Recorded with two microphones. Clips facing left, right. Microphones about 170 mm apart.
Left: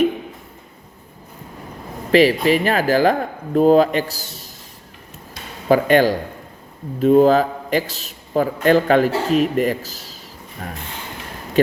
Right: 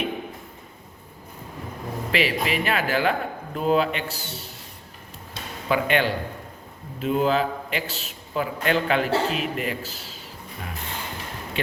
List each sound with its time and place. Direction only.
2.1 s a man's voice: 40° left (ahead or behind)
5.6 s a man's voice: 40° left (ahead or behind)